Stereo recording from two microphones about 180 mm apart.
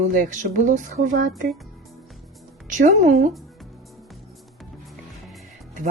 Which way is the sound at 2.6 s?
50° right (ahead or behind).